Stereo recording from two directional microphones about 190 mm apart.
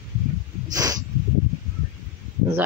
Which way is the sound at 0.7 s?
20° right (ahead or behind).